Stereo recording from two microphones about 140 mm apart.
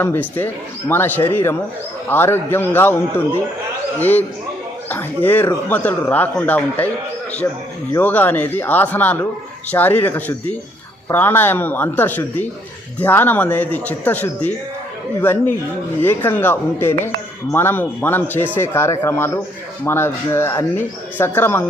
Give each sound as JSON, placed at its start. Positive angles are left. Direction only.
{"t": 0.0, "sound": "speech", "side_deg": 15}
{"t": 7.9, "sound": "speech", "side_deg": 15}